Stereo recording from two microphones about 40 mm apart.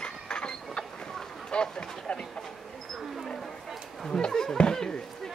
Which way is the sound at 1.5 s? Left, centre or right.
Left.